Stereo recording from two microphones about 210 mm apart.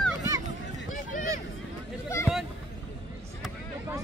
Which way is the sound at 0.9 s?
40° left (ahead or behind).